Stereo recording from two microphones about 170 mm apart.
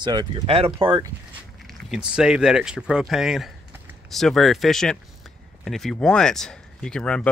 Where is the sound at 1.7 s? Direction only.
Centre (ahead or behind).